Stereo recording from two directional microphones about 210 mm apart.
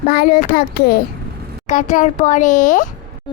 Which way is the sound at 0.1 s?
45° left (ahead or behind).